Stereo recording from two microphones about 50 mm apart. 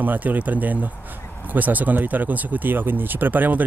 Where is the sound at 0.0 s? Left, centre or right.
Right.